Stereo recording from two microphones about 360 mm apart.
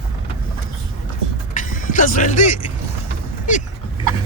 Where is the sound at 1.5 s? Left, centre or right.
Left.